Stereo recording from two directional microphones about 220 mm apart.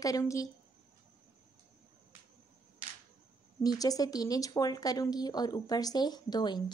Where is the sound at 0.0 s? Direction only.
15° left (ahead or behind).